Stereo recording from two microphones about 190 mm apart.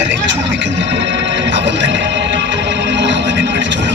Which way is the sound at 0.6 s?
70° right (ahead or behind).